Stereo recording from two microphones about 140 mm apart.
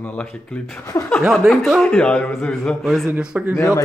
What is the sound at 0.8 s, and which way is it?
Speech, 20° left (ahead or behind).